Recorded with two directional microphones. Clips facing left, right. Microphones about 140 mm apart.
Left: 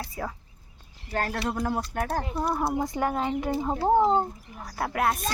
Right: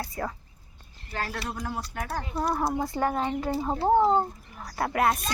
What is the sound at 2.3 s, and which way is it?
Speech, centre (ahead or behind).